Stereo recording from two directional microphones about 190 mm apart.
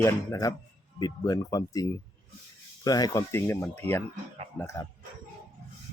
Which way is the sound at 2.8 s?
20° left (ahead or behind).